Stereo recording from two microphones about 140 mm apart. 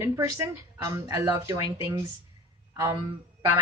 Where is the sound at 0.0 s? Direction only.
20° right (ahead or behind).